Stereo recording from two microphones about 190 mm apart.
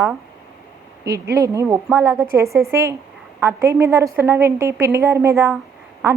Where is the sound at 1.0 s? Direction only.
15° right (ahead or behind).